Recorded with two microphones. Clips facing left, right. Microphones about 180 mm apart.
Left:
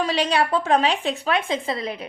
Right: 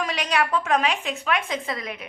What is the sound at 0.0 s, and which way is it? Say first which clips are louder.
A woman's voice: left 4 dB; 30° left (ahead or behind).